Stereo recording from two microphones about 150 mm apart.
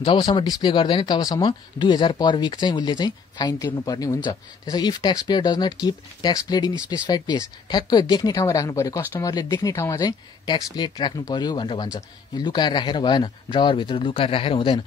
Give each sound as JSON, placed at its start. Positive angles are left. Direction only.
{"t": 0.0, "sound": "speech", "side_deg": 30}